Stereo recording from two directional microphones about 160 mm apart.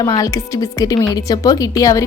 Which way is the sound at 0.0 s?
25° left (ahead or behind).